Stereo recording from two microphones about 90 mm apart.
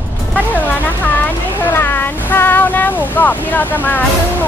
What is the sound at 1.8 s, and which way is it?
Boat, 20° left (ahead or behind).